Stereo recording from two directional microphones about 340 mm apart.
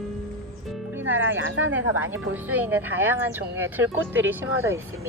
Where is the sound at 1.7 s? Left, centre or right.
Centre.